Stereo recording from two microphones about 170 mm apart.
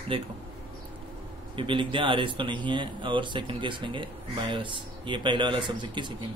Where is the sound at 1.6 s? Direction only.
30° right (ahead or behind).